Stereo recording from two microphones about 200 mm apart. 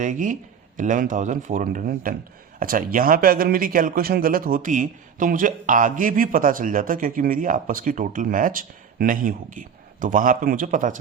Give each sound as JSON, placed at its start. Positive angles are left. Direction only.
{"t": 0.0, "sound": "speech", "side_deg": -40}